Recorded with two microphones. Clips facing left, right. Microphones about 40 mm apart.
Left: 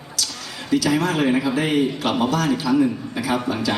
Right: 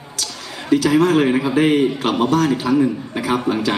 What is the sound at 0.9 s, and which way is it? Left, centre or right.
A man's voice, right.